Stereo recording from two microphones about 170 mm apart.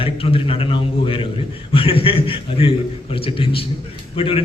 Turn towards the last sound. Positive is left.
turn(degrees=30)  # may be behind; listen again after turning